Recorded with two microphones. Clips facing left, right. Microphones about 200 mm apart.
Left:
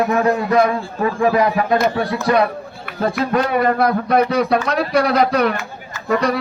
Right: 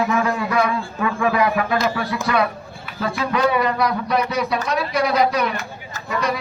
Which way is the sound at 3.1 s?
50° left (ahead or behind).